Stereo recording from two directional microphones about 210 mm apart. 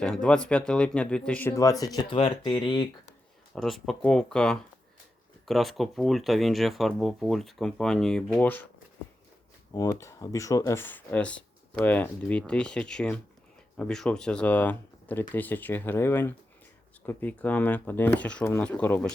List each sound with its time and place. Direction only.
0.0 s speech: 5° left (ahead or behind); by 2.8 s 20° left (ahead or behind)
3.5 s speech: centre (ahead or behind)
9.7 s speech: 15° left (ahead or behind)